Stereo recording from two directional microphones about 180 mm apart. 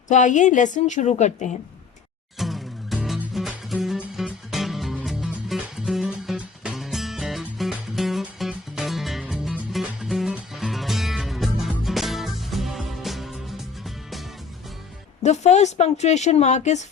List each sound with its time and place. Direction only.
0.1 s a woman's voice: 45° left (ahead or behind)
2.4 s music: centre (ahead or behind)
15.2 s speech: 40° left (ahead or behind)